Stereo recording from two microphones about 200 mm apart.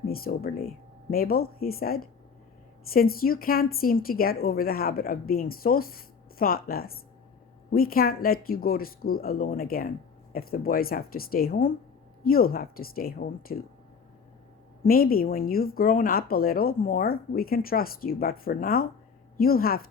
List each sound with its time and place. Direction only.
0.1 s speech: 50° left (ahead or behind)
14.8 s speech: 45° left (ahead or behind)